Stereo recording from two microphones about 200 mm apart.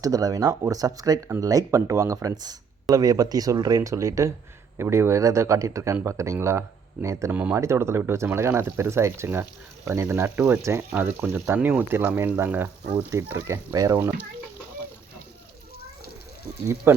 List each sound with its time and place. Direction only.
0.0 s speech: 20° right (ahead or behind)
16.9 s speech: 10° right (ahead or behind)